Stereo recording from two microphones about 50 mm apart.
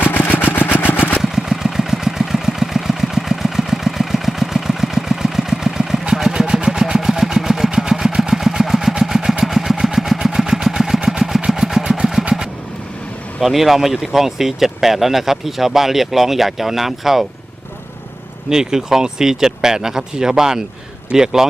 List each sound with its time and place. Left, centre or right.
0.0 s vehicle: left
1.2 s vehicle: centre
13.4 s speech: centre
18.4 s speech: centre